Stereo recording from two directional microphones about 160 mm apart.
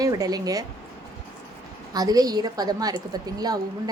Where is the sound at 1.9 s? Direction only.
25° right (ahead or behind).